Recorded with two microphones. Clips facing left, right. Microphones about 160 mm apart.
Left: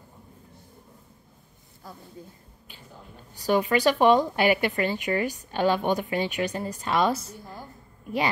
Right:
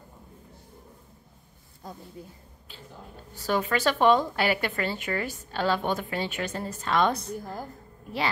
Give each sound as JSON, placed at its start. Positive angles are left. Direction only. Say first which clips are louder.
{"t": 1.8, "sound": "speech", "louder": "right 2 dB", "side_deg": -20}
{"t": 3.3, "sound": "a woman's voice", "louder": "left 4 dB", "side_deg": 15}
{"t": 7.3, "sound": "a woman's voice", "louder": "right 6 dB", "side_deg": -45}